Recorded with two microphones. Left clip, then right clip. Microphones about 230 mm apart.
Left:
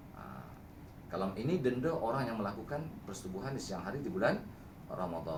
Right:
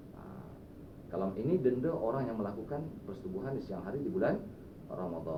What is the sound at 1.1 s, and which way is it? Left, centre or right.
Speech, left.